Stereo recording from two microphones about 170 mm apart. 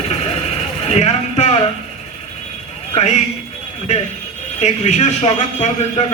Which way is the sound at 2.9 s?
40° left (ahead or behind).